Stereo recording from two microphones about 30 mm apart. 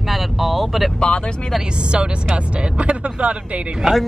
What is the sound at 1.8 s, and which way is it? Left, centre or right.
Speech, right.